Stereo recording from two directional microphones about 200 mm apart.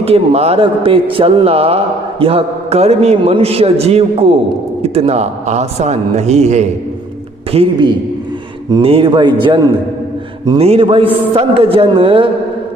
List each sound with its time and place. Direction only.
0.0 s a man's voice: 30° right (ahead or behind)
10.6 s a man's voice: 30° right (ahead or behind)